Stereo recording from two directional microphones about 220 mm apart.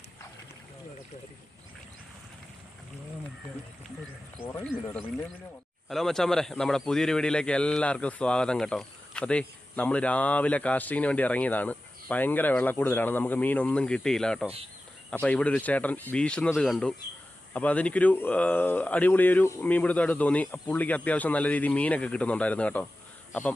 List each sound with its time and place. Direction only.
5.9 s a man's voice: centre (ahead or behind)